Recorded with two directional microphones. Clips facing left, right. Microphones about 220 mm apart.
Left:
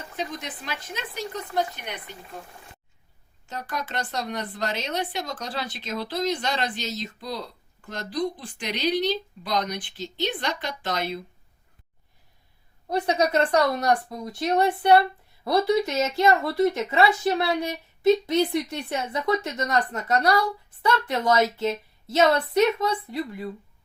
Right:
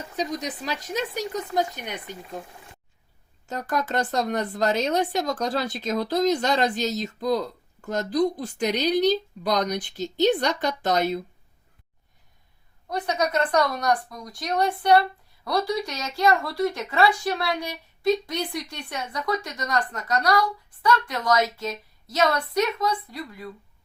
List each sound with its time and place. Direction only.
0.2 s speech: 40° right (ahead or behind)
3.4 s speech: 45° right (ahead or behind)
12.9 s speech: 30° left (ahead or behind)